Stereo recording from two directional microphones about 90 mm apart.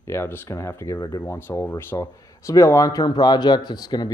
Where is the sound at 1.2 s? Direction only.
25° left (ahead or behind).